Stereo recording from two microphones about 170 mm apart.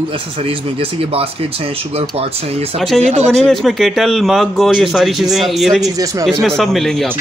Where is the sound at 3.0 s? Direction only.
40° right (ahead or behind).